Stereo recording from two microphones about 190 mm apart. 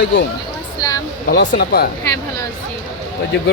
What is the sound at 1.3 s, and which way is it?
Speech, 55° left (ahead or behind).